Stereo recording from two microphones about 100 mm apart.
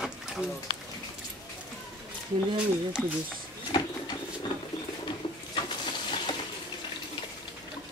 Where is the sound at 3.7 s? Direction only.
50° left (ahead or behind).